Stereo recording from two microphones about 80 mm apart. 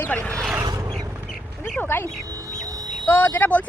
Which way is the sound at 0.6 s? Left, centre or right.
Right.